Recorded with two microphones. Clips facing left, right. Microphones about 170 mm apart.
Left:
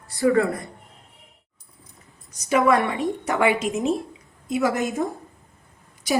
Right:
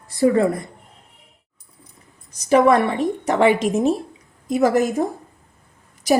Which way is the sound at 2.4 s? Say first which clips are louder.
Right 4 dB; 35° right (ahead or behind).